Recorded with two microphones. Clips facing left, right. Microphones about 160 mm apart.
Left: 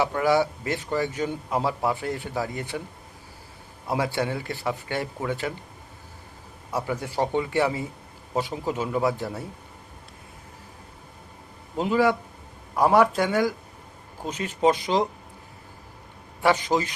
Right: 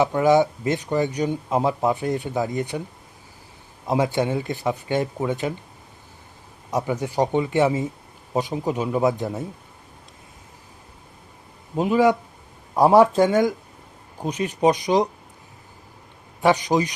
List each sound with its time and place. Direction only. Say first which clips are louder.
0.0 s a man's voice: right 4 dB; 20° right (ahead or behind)
3.8 s a man's voice: right 5 dB; 20° right (ahead or behind)
6.7 s a man's voice: right 4 dB; 20° right (ahead or behind)
11.8 s a man's voice: right 4 dB; 20° right (ahead or behind)
16.4 s speech: right 3 dB; 15° right (ahead or behind)